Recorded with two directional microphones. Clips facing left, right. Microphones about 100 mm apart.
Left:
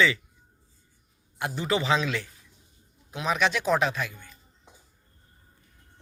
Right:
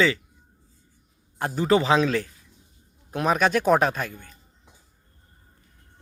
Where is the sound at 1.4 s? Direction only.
40° right (ahead or behind).